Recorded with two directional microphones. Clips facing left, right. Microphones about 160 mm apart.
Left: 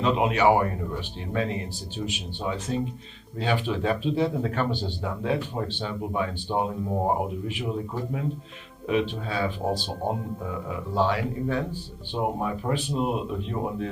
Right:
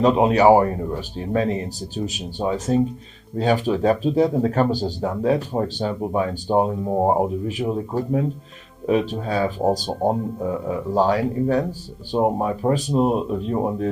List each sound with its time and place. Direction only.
0.0 s speech: 40° right (ahead or behind)
2.0 s speech: 40° right (ahead or behind)